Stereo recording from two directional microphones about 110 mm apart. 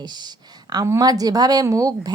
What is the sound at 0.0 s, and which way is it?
A woman's voice, 40° right (ahead or behind).